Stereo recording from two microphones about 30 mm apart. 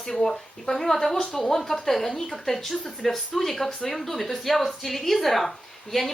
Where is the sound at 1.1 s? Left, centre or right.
Left.